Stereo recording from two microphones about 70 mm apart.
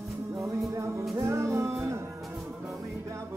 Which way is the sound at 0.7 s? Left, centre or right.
Right.